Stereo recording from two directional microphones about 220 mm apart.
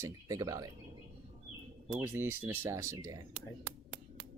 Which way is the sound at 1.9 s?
10° right (ahead or behind).